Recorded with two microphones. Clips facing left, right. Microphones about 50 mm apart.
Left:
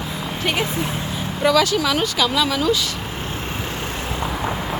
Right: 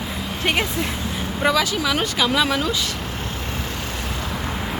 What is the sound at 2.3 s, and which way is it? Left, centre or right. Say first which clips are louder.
Speech: right 1 dB; right.